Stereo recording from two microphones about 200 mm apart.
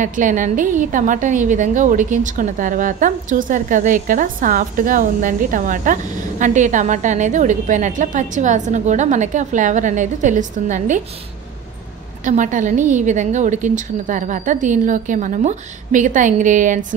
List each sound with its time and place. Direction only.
0.0 s a woman's voice: 40° right (ahead or behind)
12.3 s a woman's voice: 40° right (ahead or behind)